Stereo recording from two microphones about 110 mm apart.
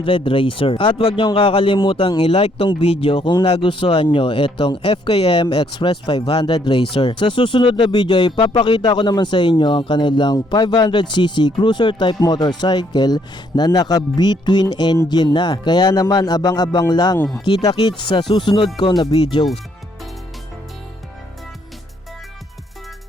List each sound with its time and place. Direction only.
0.0 s speech: 55° left (ahead or behind)
2.2 s speech: 65° left (ahead or behind); by 17.2 s 40° left (ahead or behind)
17.4 s speech: 55° left (ahead or behind)
17.7 s speech: 40° left (ahead or behind)